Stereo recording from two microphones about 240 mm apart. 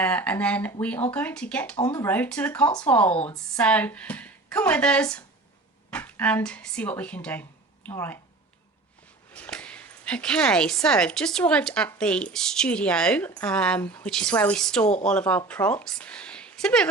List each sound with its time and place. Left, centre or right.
0.0 s speech: centre
9.3 s speech: centre